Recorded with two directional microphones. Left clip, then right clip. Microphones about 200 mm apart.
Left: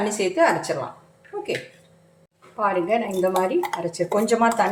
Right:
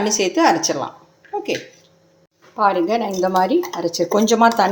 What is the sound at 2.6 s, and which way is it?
Speech, 40° right (ahead or behind).